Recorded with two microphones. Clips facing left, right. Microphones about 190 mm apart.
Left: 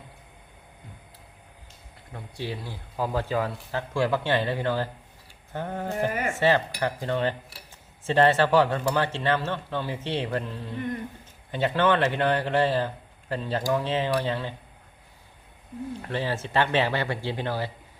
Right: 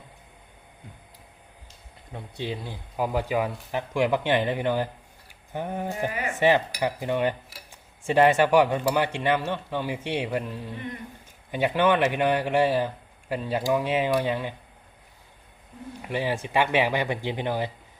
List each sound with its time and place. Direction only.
2.1 s a man's voice: 20° right (ahead or behind)
6.1 s speech: 45° left (ahead or behind)
6.3 s a man's voice: 15° right (ahead or behind)
16.0 s a man's voice: 10° right (ahead or behind)